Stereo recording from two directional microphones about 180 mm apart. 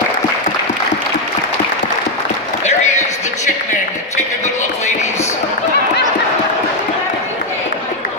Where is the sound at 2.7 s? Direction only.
40° left (ahead or behind).